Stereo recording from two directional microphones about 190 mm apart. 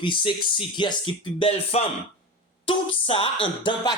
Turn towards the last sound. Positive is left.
turn(degrees=25)  # may be behind; listen again after turning